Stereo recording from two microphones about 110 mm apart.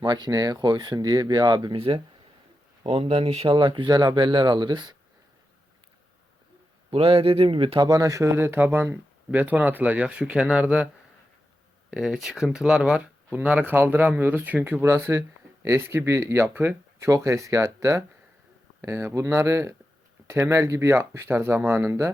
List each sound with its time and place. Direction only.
0.0 s speech: 40° right (ahead or behind)
2.8 s speech: 60° right (ahead or behind); by 4.9 s 40° right (ahead or behind)
6.9 s speech: 60° right (ahead or behind)
7.9 s speech: 35° right (ahead or behind); by 10.8 s 10° right (ahead or behind)
11.9 s speech: 5° right (ahead or behind)